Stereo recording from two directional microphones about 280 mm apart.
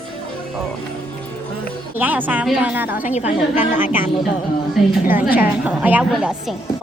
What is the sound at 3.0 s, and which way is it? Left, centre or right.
Speech, left.